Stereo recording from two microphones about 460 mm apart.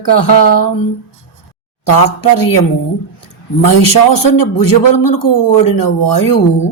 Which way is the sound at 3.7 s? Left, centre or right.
Left.